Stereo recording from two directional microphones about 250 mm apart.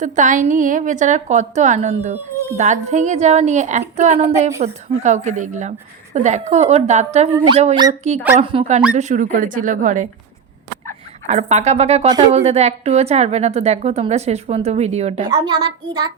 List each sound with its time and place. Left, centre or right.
0.0 s a woman's voice: right
11.3 s a child's voice: right